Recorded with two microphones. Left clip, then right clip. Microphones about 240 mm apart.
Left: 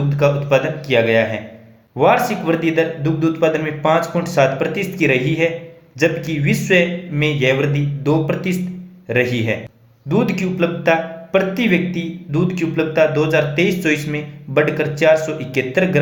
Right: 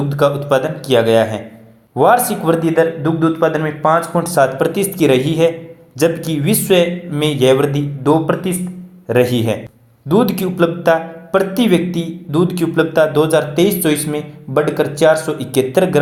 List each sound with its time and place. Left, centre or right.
0.1 s a man's voice: right
3.3 s speech: centre
4.3 s a man's voice: right
8.0 s speech: centre
9.0 s a man's voice: right